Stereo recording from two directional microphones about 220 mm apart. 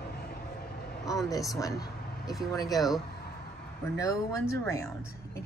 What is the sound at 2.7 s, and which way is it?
Speech, centre (ahead or behind).